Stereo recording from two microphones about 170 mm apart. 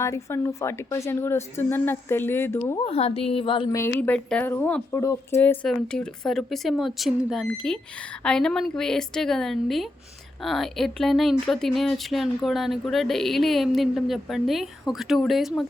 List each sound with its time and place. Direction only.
0.0 s a woman's voice: 15° left (ahead or behind)
2.8 s a woman's voice: 35° left (ahead or behind)
3.8 s a woman's voice: 15° left (ahead or behind)
5.6 s speech: 5° left (ahead or behind)